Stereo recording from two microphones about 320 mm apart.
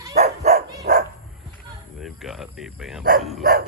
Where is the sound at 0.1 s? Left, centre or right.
Right.